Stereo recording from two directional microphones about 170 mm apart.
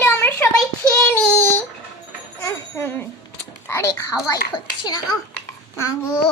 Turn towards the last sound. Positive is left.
turn(degrees=20)  # may be behind; listen again after turning